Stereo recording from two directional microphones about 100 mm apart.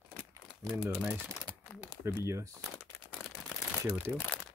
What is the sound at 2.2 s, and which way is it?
Speech, 30° right (ahead or behind).